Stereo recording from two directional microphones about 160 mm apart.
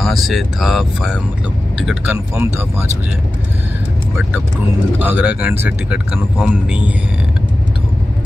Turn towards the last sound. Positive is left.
turn(degrees=-5)  # may be behind; listen again after turning